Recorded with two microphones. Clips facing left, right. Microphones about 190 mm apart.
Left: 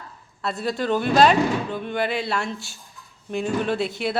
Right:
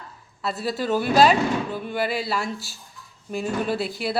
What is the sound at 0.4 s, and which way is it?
Speech, 5° right (ahead or behind).